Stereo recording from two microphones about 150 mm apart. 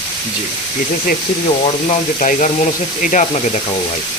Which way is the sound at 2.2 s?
60° left (ahead or behind).